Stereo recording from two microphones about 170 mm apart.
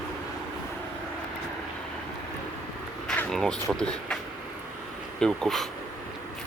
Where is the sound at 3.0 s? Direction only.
Centre (ahead or behind).